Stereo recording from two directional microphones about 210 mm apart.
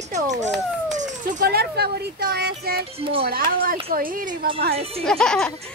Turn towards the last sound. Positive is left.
turn(degrees=5)  # may be behind; listen again after turning